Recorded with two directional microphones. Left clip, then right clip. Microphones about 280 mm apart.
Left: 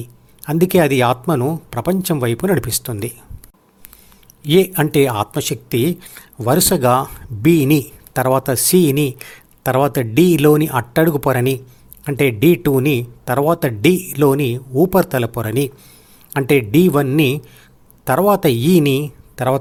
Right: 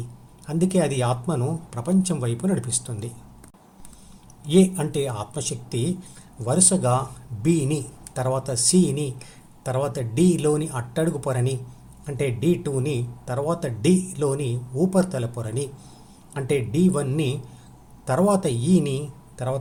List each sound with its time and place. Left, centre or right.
0.4 s speech: left
4.4 s a man's voice: left